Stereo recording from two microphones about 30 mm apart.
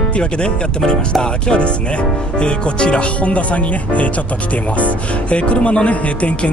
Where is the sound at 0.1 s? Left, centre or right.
Left.